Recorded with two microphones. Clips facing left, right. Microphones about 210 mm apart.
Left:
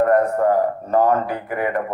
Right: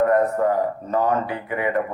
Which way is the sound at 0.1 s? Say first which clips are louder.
Left 2 dB; 45° left (ahead or behind).